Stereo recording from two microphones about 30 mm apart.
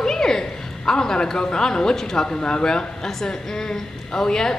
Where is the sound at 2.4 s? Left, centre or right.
Left.